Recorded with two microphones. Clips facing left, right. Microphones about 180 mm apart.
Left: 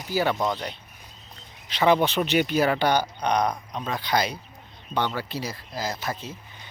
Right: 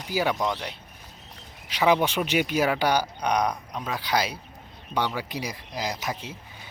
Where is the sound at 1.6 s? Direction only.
10° right (ahead or behind).